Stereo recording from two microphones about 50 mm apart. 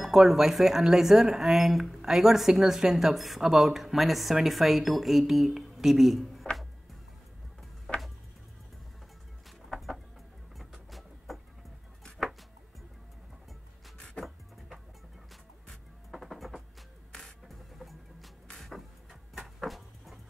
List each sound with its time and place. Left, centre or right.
0.0 s speech: centre
6.5 s music: left
7.9 s tick-tock: centre
9.7 s music: centre
10.6 s vehicle: centre
13.9 s vehicle: centre
16.1 s music: centre
18.6 s a sound: centre